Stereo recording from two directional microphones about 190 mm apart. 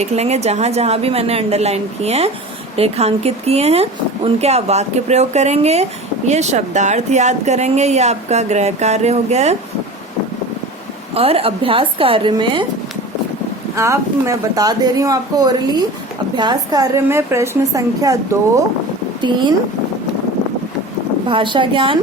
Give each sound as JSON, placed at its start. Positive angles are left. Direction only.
{"t": 0.0, "sound": "speech", "side_deg": -35}
{"t": 11.1, "sound": "speech", "side_deg": -30}
{"t": 13.7, "sound": "a woman's voice", "side_deg": -15}
{"t": 21.2, "sound": "speech", "side_deg": -25}